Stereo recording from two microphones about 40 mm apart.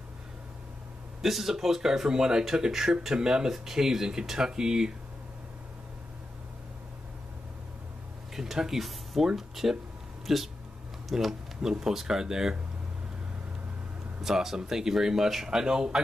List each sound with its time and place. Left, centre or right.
1.2 s speech: centre
8.4 s speech: centre
14.2 s speech: centre